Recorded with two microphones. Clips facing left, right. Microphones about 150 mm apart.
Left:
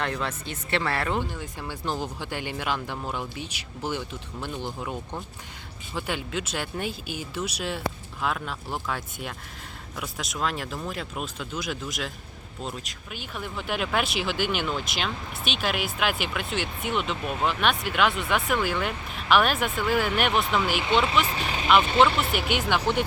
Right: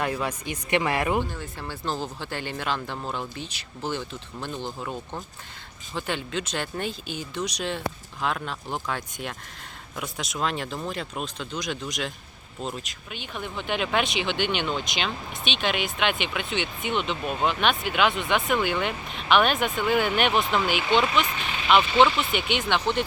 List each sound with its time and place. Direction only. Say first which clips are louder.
0.0 s speech: right 2 dB; 10° right (ahead or behind)
1.2 s speech: right 1 dB; 10° left (ahead or behind)
21.2 s speech: left 3 dB; 35° left (ahead or behind)
22.2 s speech: even; 5° left (ahead or behind)